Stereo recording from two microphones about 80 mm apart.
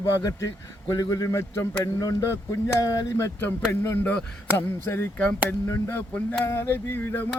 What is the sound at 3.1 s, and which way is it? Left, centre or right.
Speech, left.